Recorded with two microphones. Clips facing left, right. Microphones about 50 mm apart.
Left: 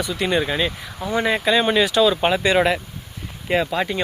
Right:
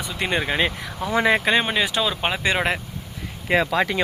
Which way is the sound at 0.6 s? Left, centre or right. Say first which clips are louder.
Right 1 dB; right.